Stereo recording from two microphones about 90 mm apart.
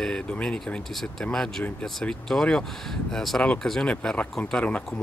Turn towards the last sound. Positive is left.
turn(degrees=15)  # may be behind; listen again after turning